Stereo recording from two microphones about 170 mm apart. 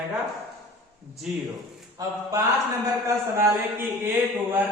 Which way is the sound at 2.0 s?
20° right (ahead or behind).